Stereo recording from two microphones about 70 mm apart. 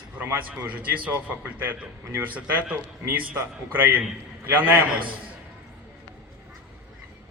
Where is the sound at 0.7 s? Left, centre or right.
Right.